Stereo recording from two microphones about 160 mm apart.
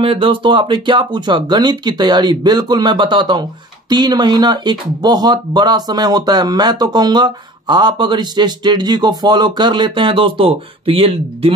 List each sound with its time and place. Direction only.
0.0 s speech: 35° right (ahead or behind)